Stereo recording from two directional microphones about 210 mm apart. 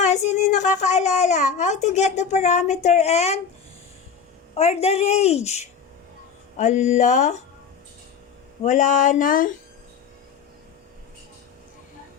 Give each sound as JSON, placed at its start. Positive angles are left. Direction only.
{"t": 0.0, "sound": "a child's voice", "side_deg": 35}
{"t": 4.5, "sound": "a child's voice", "side_deg": 30}
{"t": 8.6, "sound": "a child's voice", "side_deg": 35}